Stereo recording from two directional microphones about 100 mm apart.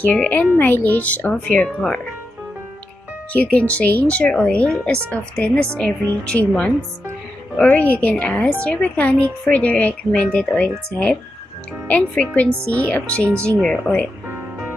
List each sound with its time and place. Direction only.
0.1 s a woman's voice: 15° left (ahead or behind)
3.3 s a woman's voice: 15° left (ahead or behind)
7.5 s a woman's voice: 15° left (ahead or behind)